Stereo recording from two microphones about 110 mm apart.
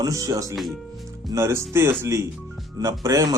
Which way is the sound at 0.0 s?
35° right (ahead or behind).